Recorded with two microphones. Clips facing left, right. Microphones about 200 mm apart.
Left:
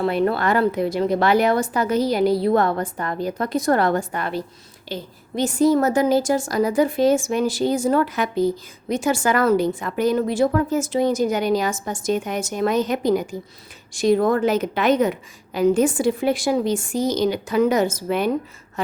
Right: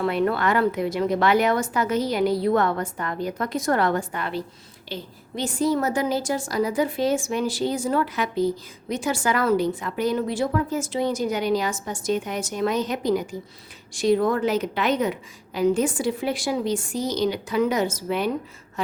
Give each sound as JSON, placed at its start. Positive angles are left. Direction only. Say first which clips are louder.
{"t": 0.0, "sound": "a woman's voice", "louder": "left 2 dB", "side_deg": 35}